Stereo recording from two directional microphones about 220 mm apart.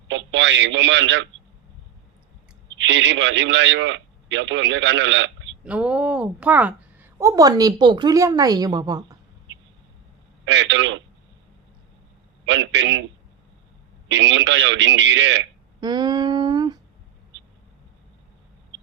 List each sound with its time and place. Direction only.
0.1 s a man's voice: 55° right (ahead or behind)
2.7 s a man's voice: 55° right (ahead or behind)
5.6 s a woman's voice: 5° right (ahead or behind)
10.4 s a man's voice: 55° right (ahead or behind)
12.5 s a man's voice: 55° right (ahead or behind)
14.1 s a man's voice: 55° right (ahead or behind)
15.8 s humming: 20° right (ahead or behind)